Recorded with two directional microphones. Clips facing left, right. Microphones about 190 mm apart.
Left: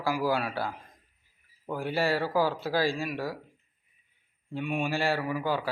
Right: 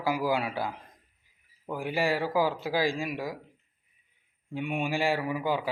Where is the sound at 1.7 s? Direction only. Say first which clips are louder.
Even; 15° right (ahead or behind).